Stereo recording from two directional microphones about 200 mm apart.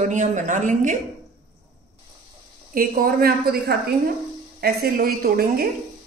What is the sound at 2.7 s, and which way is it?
Speech, 45° right (ahead or behind).